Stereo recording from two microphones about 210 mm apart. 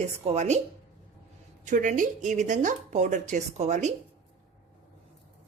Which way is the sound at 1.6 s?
35° right (ahead or behind).